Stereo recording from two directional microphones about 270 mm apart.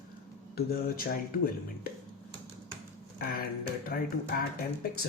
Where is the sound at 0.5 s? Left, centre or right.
Left.